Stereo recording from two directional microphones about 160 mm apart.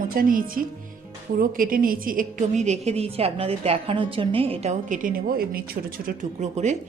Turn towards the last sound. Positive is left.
turn(degrees=-45)  # may be behind; listen again after turning